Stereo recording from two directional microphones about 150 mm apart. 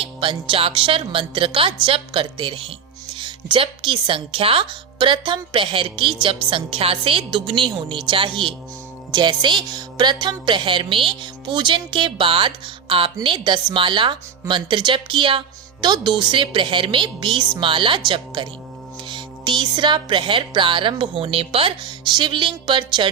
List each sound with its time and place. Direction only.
0.0 s a woman's voice: 35° right (ahead or behind)